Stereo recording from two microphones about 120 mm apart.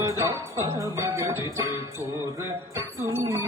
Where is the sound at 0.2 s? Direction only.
25° right (ahead or behind).